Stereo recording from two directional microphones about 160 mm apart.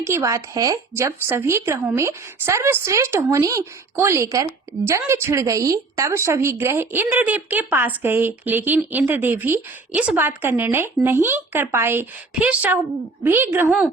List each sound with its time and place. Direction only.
0.0 s a woman's voice: 20° right (ahead or behind)